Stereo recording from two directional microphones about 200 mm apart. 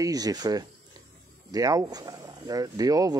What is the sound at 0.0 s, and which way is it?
Speech, 20° right (ahead or behind).